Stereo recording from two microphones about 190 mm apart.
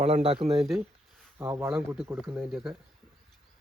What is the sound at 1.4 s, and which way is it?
Speech, 10° right (ahead or behind).